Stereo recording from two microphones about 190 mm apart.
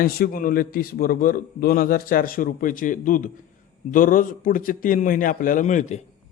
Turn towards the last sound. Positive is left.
turn(degrees=40)  # may be behind; listen again after turning